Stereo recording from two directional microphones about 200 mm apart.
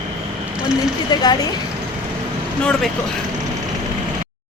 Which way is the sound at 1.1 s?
20° left (ahead or behind).